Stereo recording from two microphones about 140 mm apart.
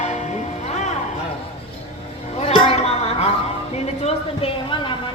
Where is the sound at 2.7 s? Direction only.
50° left (ahead or behind).